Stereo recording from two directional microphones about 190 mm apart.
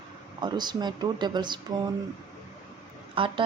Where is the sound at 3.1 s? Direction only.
25° right (ahead or behind).